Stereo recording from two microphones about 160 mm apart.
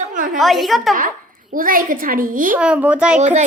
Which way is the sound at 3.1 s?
45° right (ahead or behind).